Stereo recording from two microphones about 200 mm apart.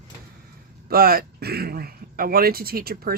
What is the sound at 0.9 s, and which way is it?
Speech, 50° right (ahead or behind).